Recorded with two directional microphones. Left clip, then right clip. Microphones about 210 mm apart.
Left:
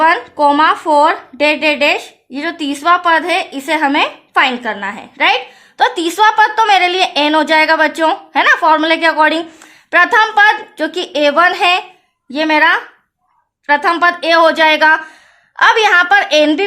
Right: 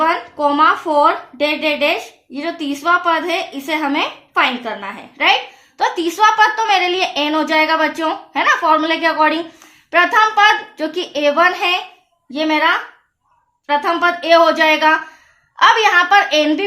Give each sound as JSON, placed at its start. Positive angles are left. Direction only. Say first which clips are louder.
{"t": 0.0, "sound": "a woman's voice", "louder": "left 5 dB", "side_deg": 50}